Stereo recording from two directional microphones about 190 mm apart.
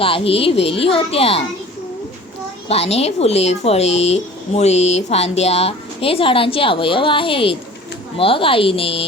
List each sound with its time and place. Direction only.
0.0 s speech: 30° left (ahead or behind)
2.6 s speech: 30° left (ahead or behind)